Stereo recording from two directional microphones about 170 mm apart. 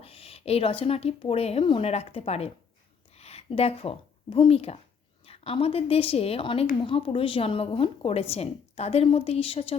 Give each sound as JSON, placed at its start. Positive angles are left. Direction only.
{"t": 0.0, "sound": "a woman's voice", "side_deg": 35}